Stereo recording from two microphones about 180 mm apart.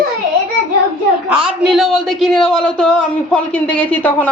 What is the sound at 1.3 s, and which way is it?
A man's voice, 5° right (ahead or behind).